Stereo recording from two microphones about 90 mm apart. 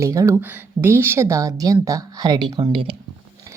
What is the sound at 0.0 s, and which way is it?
Speech, 35° right (ahead or behind).